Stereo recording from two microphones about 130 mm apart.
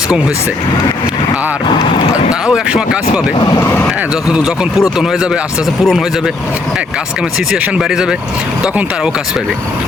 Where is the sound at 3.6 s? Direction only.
20° left (ahead or behind).